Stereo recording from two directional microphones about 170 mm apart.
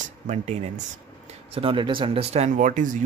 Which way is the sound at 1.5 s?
30° right (ahead or behind).